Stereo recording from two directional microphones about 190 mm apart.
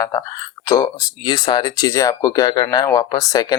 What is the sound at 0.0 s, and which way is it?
Speech, 20° left (ahead or behind).